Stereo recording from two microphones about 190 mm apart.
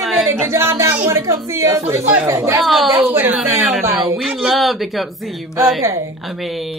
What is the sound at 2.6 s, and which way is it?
Speech, centre (ahead or behind).